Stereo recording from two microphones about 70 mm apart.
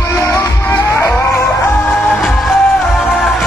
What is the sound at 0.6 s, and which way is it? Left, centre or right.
Music, left.